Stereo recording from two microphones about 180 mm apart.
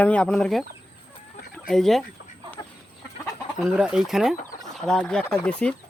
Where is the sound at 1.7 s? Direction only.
Centre (ahead or behind).